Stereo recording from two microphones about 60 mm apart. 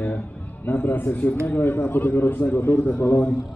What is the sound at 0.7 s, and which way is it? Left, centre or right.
A man's voice, left.